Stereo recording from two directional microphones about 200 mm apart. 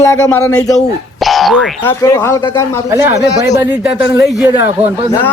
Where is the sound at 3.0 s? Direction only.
15° right (ahead or behind).